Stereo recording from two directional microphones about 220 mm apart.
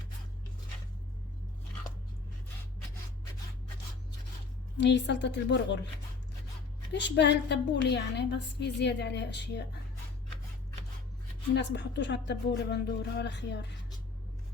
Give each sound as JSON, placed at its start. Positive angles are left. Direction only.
{"t": 4.8, "sound": "a woman's voice", "side_deg": 55}
{"t": 6.9, "sound": "a woman's voice", "side_deg": 50}
{"t": 11.5, "sound": "a woman's voice", "side_deg": 50}